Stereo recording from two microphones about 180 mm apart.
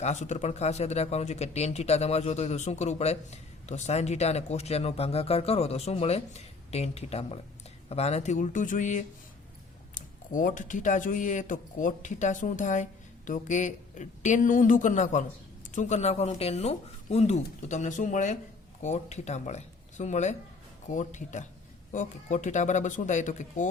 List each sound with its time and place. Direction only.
0.0 s speech: 40° left (ahead or behind)